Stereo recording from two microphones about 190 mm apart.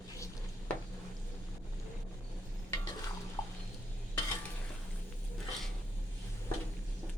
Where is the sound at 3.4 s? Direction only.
15° left (ahead or behind).